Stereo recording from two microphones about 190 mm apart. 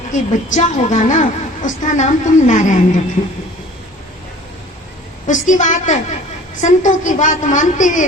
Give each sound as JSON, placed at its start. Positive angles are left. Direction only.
{"t": 0.1, "sound": "a woman's voice", "side_deg": 40}
{"t": 5.2, "sound": "a woman's voice", "side_deg": 40}